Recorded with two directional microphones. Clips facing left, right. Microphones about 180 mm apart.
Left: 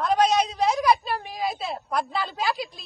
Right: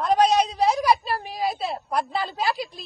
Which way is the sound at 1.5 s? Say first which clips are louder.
Right 2 dB; centre (ahead or behind).